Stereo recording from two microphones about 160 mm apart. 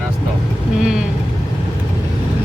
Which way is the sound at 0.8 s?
5° right (ahead or behind).